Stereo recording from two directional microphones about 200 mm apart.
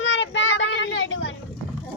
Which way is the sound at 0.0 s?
65° left (ahead or behind).